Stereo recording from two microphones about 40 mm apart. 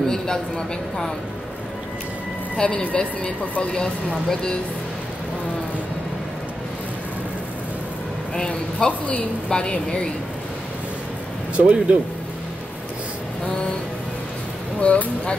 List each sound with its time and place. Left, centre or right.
0.1 s speech: centre
2.6 s speech: left
3.7 s speech: centre
8.5 s speech: left
11.5 s speech: right
14.8 s speech: left